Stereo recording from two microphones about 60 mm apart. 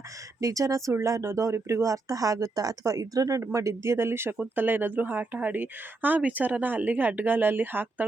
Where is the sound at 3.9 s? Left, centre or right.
Right.